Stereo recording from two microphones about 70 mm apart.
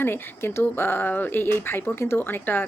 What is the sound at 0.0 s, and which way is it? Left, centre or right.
Speech, left.